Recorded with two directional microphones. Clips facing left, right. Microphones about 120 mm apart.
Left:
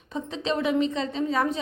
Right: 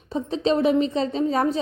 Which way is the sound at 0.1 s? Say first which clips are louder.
Right 6 dB; 35° right (ahead or behind).